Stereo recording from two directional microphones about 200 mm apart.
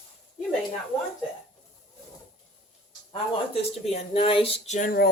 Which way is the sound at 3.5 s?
30° left (ahead or behind).